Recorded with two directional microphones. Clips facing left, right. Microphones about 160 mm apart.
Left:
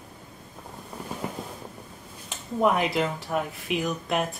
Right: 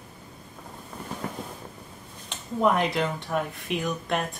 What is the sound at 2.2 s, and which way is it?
Speech, 5° left (ahead or behind).